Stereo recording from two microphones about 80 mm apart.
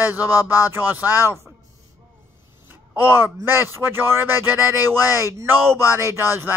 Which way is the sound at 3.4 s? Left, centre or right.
Right.